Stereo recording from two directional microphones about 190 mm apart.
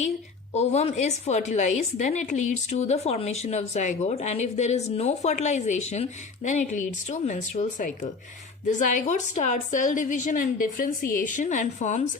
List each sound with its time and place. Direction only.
0.5 s a woman's voice: 35° left (ahead or behind)